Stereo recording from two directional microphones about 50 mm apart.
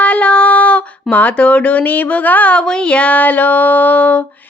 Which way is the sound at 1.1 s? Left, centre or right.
Left.